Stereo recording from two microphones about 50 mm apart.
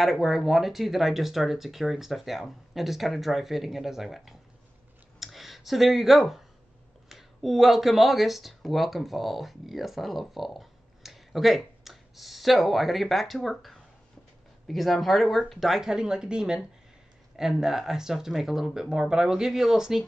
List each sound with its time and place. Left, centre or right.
0.0 s speech: centre
15.8 s speech: centre